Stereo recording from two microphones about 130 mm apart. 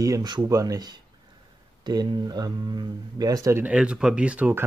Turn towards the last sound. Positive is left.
turn(degrees=-10)  # may be behind; listen again after turning